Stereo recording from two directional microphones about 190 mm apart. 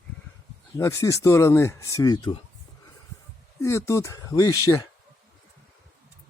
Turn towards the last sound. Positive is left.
turn(degrees=15)  # may be behind; listen again after turning